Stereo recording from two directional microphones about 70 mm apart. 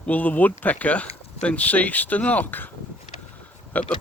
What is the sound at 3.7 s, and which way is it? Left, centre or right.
Speech, left.